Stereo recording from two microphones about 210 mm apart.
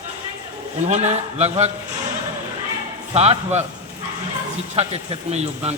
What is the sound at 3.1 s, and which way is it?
Speech, 30° right (ahead or behind).